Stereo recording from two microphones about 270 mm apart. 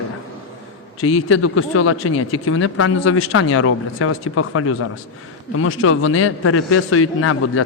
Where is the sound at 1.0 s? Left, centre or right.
Left.